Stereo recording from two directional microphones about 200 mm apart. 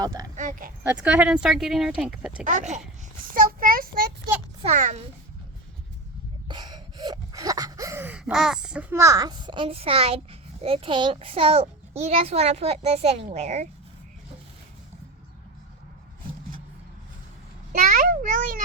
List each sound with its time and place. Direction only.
0.0 s speech: 20° right (ahead or behind)
0.3 s a sound: 40° right (ahead or behind)
0.9 s speech: 5° right (ahead or behind)
2.4 s a child's voice: 40° right (ahead or behind)
4.6 s a child's voice: 35° right (ahead or behind)
6.5 s gasp: 20° right (ahead or behind)
10.6 s a child's voice: 30° right (ahead or behind)
17.7 s a child's voice: 45° right (ahead or behind)